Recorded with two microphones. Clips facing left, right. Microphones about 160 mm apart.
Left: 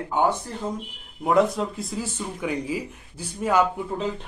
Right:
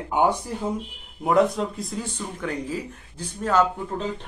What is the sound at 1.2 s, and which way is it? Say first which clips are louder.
A man's voice: even; centre (ahead or behind).